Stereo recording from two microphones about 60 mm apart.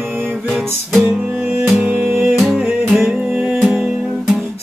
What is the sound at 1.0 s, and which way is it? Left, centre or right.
Music, right.